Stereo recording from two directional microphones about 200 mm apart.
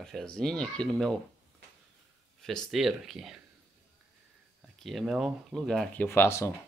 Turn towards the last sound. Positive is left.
turn(degrees=15)  # may be behind; listen again after turning